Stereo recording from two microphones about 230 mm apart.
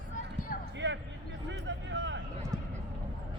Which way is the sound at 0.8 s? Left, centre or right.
Right.